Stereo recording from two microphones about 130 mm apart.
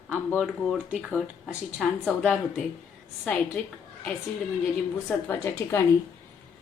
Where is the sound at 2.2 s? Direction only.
10° left (ahead or behind).